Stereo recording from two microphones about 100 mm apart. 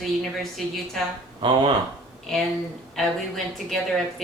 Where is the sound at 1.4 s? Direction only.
50° right (ahead or behind).